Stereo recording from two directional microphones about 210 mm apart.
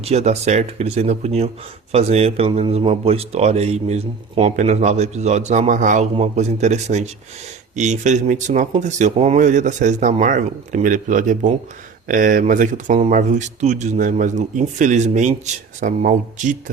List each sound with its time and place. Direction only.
0.0 s speech: 30° right (ahead or behind)